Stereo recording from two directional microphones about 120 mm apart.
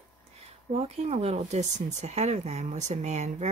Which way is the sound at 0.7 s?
55° right (ahead or behind).